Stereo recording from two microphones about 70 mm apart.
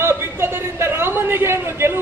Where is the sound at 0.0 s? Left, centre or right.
Right.